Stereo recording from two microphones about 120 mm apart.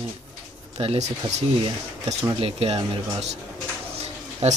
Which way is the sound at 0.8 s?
65° right (ahead or behind).